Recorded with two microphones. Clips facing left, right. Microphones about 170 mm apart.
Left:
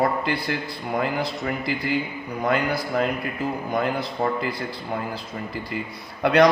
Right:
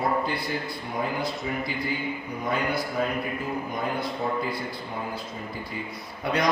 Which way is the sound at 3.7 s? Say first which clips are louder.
Left 4 dB; 75° left (ahead or behind).